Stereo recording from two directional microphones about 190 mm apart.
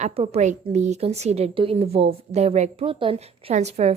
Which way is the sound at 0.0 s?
35° right (ahead or behind).